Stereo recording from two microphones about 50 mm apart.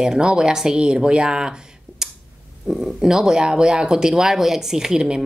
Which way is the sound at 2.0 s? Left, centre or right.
Centre.